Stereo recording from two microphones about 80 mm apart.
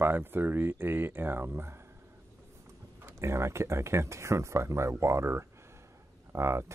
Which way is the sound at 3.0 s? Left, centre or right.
Right.